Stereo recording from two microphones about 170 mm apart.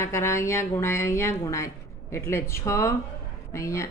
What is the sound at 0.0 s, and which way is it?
Speech, 15° left (ahead or behind).